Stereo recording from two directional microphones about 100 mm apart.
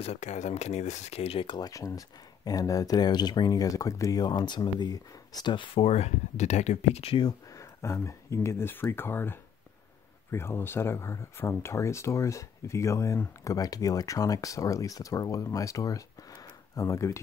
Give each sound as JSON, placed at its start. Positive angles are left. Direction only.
{"t": 0.0, "sound": "speech", "side_deg": 90}
{"t": 1.5, "sound": "speech", "side_deg": 35}
{"t": 5.8, "sound": "speech", "side_deg": 90}
{"t": 7.2, "sound": "speech", "side_deg": 40}